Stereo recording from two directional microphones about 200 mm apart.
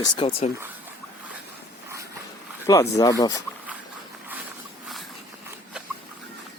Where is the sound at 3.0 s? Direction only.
20° left (ahead or behind).